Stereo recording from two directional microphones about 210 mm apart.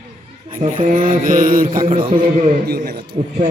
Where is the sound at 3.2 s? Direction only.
30° right (ahead or behind).